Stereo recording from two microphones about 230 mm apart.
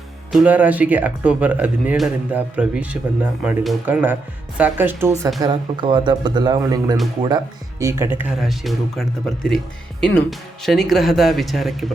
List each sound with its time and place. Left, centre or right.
0.3 s speech: centre
5.4 s speech: centre